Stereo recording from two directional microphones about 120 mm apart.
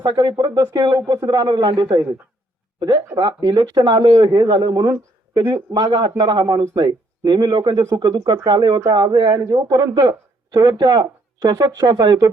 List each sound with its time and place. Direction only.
0.0 s a man's voice: 35° right (ahead or behind)
3.2 s a man's voice: 35° right (ahead or behind)
9.3 s a man's voice: 25° right (ahead or behind)